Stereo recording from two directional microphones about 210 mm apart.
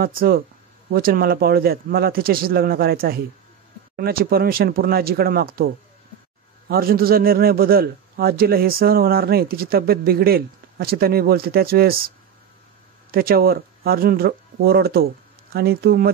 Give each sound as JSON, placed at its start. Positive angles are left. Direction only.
{"t": 0.0, "sound": "a man's voice", "side_deg": -45}
{"t": 6.7, "sound": "a man's voice", "side_deg": -45}
{"t": 13.1, "sound": "a man's voice", "side_deg": -45}